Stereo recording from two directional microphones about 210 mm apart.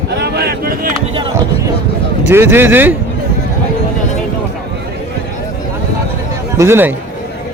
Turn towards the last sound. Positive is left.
turn(degrees=-10)  # may be behind; listen again after turning